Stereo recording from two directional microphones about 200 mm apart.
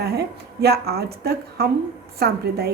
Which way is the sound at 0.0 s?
55° right (ahead or behind).